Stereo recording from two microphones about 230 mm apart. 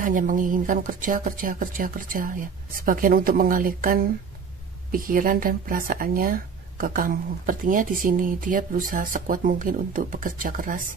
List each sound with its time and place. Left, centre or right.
0.0 s speech: right